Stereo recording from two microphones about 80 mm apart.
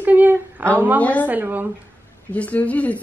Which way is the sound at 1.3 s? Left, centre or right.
Right.